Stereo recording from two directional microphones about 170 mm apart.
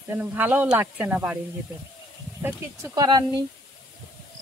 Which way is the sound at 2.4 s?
20° right (ahead or behind).